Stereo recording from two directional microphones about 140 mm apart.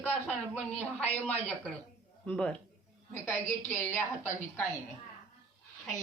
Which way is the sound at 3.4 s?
20° left (ahead or behind).